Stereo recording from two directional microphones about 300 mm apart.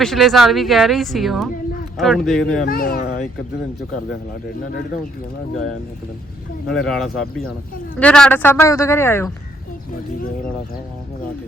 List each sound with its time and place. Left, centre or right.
0.0 s speech: centre
2.6 s speech: left
6.7 s speech: centre